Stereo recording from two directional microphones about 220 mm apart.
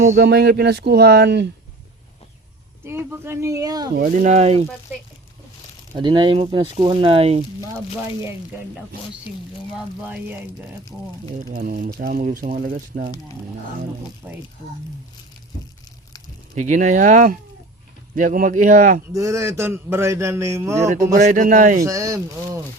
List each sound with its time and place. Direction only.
0.0 s speech: 40° right (ahead or behind)
2.8 s a man's voice: 10° right (ahead or behind)
3.9 s speech: 40° right (ahead or behind)
5.9 s speech: 20° right (ahead or behind)
9.7 s a man's voice: 5° right (ahead or behind)
11.4 s speech: 40° right (ahead or behind)
14.2 s speech: 5° right (ahead or behind)
16.6 s speech: 35° right (ahead or behind)
19.1 s a man's voice: 15° right (ahead or behind)
21.2 s speech: 35° right (ahead or behind)
21.8 s a man's voice: 15° right (ahead or behind)